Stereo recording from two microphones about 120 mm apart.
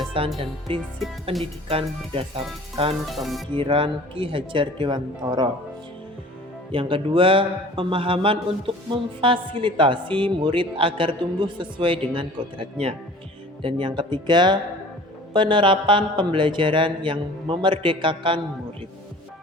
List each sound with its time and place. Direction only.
0.1 s a man's voice: 50° right (ahead or behind)
3.1 s speech: centre (ahead or behind)
3.5 s a man's voice: 45° right (ahead or behind)
6.7 s a man's voice: 45° right (ahead or behind)